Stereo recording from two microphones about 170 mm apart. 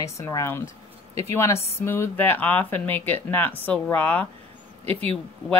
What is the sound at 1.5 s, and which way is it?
Speech, 40° left (ahead or behind).